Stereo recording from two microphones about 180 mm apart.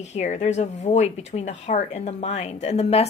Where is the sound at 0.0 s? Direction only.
40° left (ahead or behind).